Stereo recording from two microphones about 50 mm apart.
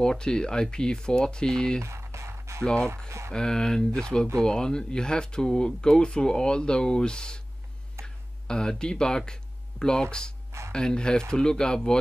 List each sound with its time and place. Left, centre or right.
0.0 s speech: centre
1.8 s a sound: right
2.6 s speech: centre
3.1 s speech: right
3.3 s speech: centre
8.0 s a sound: centre
10.7 s speech: centre